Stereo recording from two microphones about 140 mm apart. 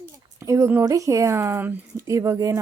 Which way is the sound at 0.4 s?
20° right (ahead or behind).